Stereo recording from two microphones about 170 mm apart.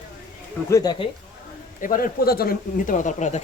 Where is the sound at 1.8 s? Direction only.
55° left (ahead or behind).